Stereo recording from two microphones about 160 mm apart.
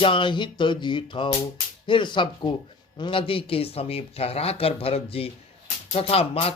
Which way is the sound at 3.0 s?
35° left (ahead or behind).